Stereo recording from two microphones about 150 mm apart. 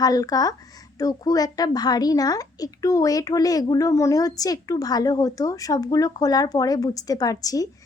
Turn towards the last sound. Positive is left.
turn(degrees=25)  # may be behind; listen again after turning